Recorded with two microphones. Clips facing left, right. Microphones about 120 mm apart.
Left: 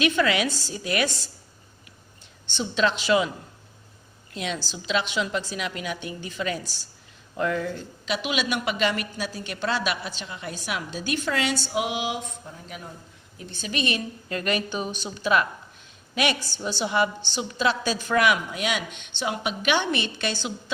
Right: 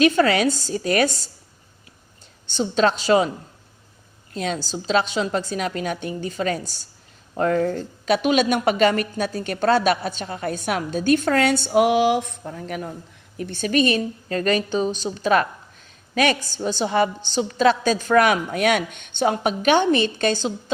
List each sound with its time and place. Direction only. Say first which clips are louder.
0.0 s a woman's voice: right 6 dB; 40° right (ahead or behind)
2.5 s a woman's voice: right 5 dB; 40° right (ahead or behind)
4.4 s a woman's voice: right 5 dB; 40° right (ahead or behind)